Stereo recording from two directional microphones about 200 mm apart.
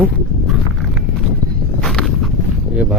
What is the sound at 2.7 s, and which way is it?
Speech, 5° right (ahead or behind).